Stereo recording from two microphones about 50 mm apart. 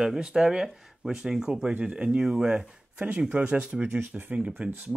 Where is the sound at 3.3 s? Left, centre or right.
Right.